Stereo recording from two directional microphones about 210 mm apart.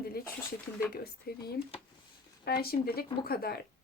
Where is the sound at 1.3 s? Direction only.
45° left (ahead or behind).